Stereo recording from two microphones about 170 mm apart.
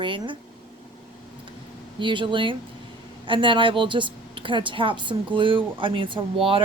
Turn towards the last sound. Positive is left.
turn(degrees=-30)  # may be behind; listen again after turning